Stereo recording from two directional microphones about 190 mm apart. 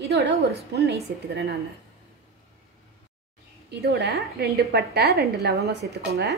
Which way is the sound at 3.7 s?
55° right (ahead or behind).